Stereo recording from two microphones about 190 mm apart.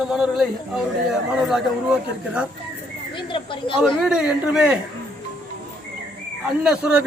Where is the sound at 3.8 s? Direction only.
Centre (ahead or behind).